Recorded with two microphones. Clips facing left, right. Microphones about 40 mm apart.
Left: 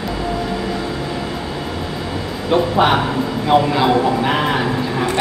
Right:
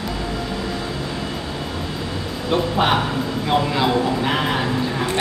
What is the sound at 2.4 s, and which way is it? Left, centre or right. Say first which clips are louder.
Speech: left 4 dB; centre.